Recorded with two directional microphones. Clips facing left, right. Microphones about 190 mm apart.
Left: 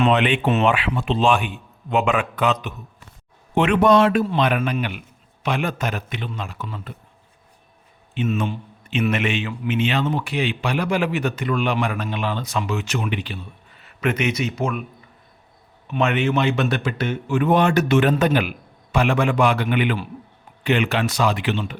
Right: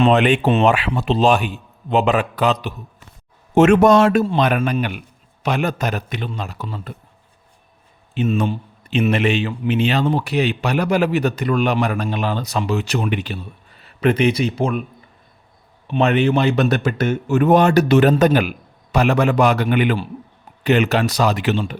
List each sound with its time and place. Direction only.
0.0 s a man's voice: 45° right (ahead or behind)
8.1 s a man's voice: 40° right (ahead or behind)
15.9 s a man's voice: 35° right (ahead or behind)